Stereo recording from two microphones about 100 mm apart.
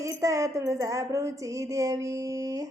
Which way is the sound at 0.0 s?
30° right (ahead or behind).